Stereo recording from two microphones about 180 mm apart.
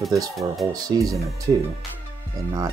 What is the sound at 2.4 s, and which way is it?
Speech, 20° right (ahead or behind).